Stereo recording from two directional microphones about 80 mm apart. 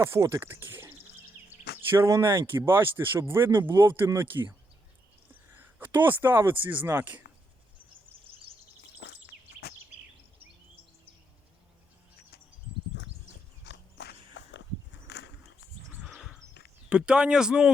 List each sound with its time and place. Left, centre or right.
0.0 s speech: right
5.5 s speech: right
16.0 s wild animals: centre
16.9 s speech: centre